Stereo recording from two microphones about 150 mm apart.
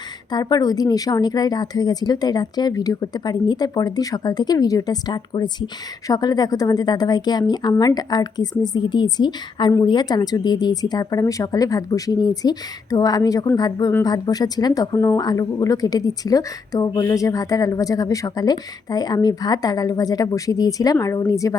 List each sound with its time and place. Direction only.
0.3 s speech: 25° left (ahead or behind)